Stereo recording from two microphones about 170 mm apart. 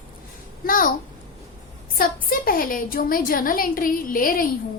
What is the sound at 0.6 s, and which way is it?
Speech, 55° left (ahead or behind).